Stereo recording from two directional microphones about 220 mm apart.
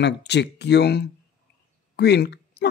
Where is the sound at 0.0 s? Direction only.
50° left (ahead or behind).